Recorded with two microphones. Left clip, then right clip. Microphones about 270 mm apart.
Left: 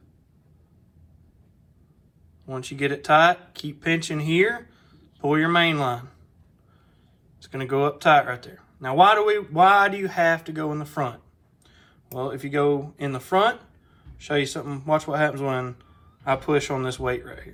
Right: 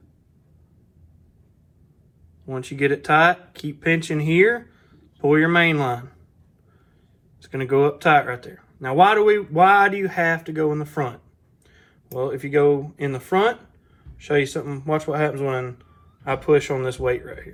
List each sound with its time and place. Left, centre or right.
2.5 s speech: centre
7.4 s speech: centre